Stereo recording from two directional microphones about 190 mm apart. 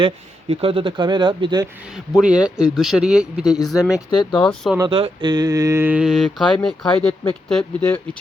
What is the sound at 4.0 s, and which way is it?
Speech, 25° left (ahead or behind).